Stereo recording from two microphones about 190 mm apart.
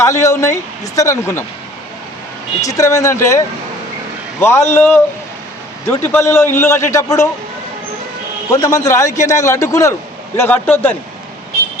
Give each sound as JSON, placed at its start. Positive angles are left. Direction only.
{"t": 0.0, "sound": "a man's voice", "side_deg": 15}
{"t": 2.6, "sound": "a man's voice", "side_deg": 15}
{"t": 8.4, "sound": "a man's voice", "side_deg": 15}